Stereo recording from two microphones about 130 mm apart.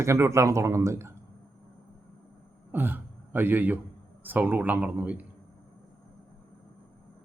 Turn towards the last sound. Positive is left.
turn(degrees=-10)  # may be behind; listen again after turning